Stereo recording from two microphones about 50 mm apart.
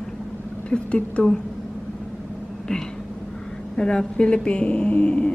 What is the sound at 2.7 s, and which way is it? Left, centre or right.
A woman's voice, centre.